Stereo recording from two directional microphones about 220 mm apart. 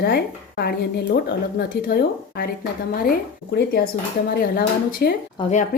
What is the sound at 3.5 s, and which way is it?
Speech, 50° left (ahead or behind).